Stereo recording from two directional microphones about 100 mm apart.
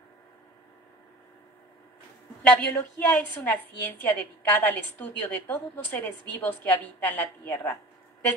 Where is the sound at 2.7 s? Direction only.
15° left (ahead or behind).